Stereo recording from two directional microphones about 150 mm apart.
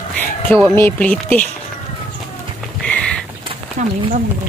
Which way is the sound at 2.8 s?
5° left (ahead or behind).